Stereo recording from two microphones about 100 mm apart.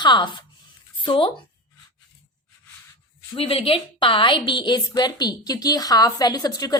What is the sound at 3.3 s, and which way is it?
A woman's voice, 65° left (ahead or behind).